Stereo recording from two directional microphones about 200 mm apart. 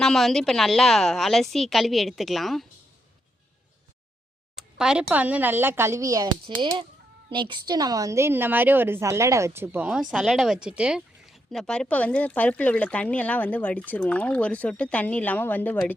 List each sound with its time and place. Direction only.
0.0 s a woman's voice: centre (ahead or behind)
4.5 s a woman's voice: 5° right (ahead or behind)